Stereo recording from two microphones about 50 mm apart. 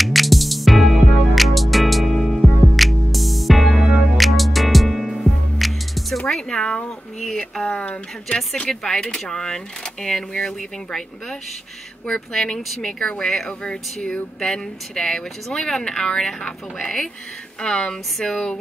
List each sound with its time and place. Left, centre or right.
0.0 s music: centre
7.3 s speech: centre
8.6 s speech: centre
13.5 s speech: left